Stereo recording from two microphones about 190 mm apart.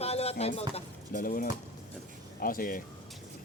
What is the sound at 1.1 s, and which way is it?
Speech, 45° left (ahead or behind).